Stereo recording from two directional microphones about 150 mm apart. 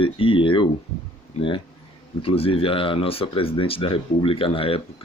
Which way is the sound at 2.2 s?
40° left (ahead or behind).